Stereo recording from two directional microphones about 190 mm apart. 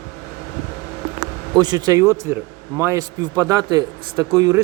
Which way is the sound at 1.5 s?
20° right (ahead or behind).